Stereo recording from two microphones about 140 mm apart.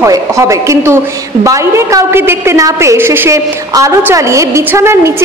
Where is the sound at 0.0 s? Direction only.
20° right (ahead or behind).